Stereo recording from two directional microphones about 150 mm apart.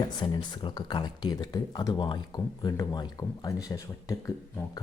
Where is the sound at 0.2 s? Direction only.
30° left (ahead or behind).